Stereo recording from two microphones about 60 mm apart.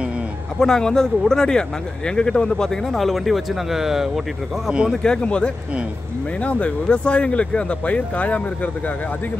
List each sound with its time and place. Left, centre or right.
0.6 s speech: centre
5.0 s speech: centre